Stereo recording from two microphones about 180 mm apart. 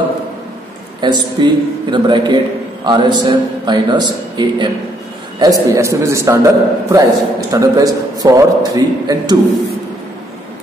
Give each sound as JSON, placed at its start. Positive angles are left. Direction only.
{"t": 1.0, "sound": "a man's voice", "side_deg": -25}